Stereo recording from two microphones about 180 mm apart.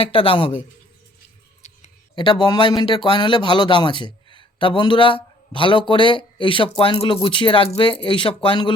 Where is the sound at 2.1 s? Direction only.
25° left (ahead or behind).